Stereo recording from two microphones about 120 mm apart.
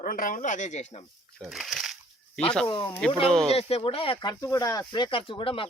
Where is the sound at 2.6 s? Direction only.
45° left (ahead or behind).